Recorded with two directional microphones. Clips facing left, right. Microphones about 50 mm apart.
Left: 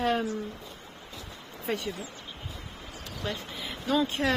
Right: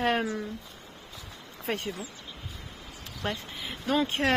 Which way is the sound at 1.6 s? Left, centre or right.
Right.